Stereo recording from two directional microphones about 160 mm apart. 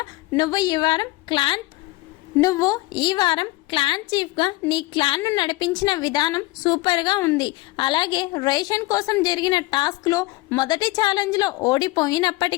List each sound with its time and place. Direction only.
0.3 s a woman's voice: 25° left (ahead or behind)